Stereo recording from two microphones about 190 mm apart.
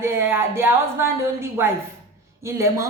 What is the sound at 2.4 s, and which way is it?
Speech, 15° right (ahead or behind).